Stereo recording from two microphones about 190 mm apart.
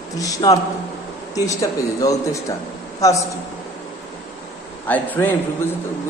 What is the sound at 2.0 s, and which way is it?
Mantra, 15° left (ahead or behind).